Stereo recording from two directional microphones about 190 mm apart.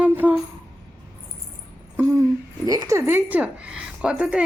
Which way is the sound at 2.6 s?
15° right (ahead or behind).